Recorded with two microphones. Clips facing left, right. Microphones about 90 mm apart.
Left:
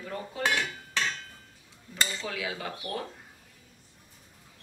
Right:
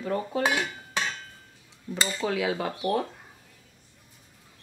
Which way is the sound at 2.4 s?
35° right (ahead or behind).